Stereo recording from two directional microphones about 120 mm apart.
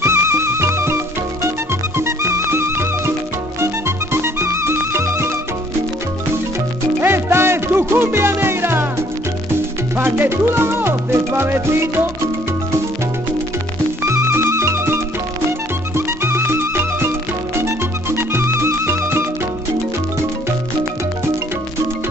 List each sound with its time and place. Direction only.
0.0 s music: 20° right (ahead or behind)
7.0 s music: 20° right (ahead or behind)
9.9 s music: 20° right (ahead or behind)
14.0 s music: 25° right (ahead or behind)